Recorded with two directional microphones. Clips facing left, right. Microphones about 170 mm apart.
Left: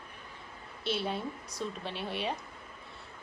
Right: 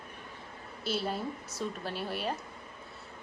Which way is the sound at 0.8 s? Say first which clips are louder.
Even; centre (ahead or behind).